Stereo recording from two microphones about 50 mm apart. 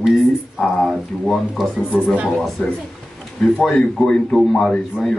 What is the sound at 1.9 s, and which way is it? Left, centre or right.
Speech, right.